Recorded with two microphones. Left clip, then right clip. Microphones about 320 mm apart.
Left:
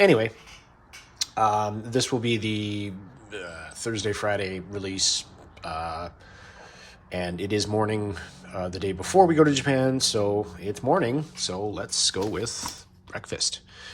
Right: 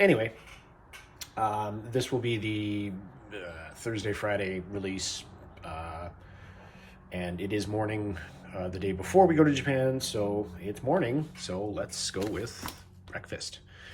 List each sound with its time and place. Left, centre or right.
0.0 s speech: centre
7.1 s speech: centre
13.1 s a sound: centre